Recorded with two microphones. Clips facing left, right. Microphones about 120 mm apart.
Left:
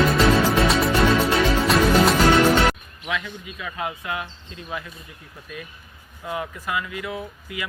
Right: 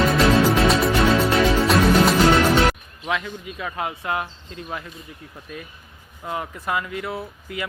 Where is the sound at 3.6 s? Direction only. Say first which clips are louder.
Right 2 dB; 40° right (ahead or behind).